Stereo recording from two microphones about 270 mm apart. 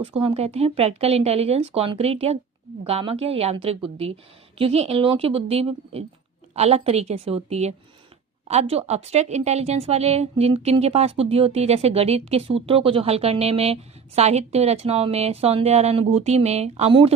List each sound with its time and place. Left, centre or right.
0.0 s a woman's voice: right